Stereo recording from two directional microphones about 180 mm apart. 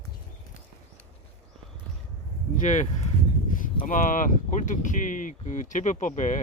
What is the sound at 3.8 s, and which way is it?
Speech, 45° left (ahead or behind).